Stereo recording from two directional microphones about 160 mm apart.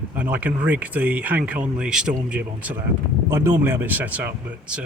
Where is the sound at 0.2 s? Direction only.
10° right (ahead or behind).